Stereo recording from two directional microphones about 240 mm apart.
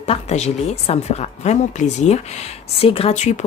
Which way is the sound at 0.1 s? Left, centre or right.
Left.